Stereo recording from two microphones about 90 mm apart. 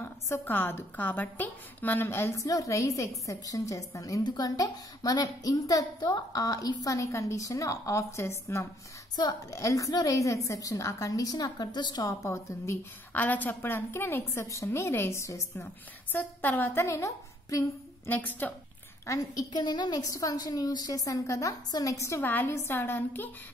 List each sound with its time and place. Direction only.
0.0 s a woman's voice: 25° left (ahead or behind)
2.4 s a woman's voice: 40° left (ahead or behind)
4.2 s a woman's voice: 50° left (ahead or behind); by 8.6 s 30° left (ahead or behind)
9.1 s a woman's voice: 45° left (ahead or behind)
12.1 s a woman's voice: 35° left (ahead or behind)
13.1 s a woman's voice: 20° left (ahead or behind)
15.6 s a woman's voice: 20° left (ahead or behind); by 17.6 s 40° left (ahead or behind)
18.0 s a woman's voice: 20° left (ahead or behind)
19.0 s a woman's voice: 40° left (ahead or behind); by 23.3 s 20° left (ahead or behind)